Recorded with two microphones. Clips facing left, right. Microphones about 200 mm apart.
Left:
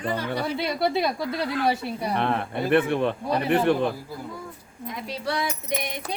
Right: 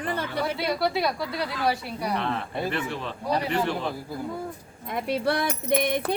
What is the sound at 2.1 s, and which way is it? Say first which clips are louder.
A man's voice: left 3 dB; 55° left (ahead or behind).